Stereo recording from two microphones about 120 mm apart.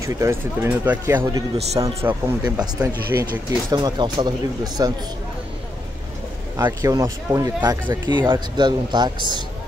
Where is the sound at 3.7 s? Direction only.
35° right (ahead or behind).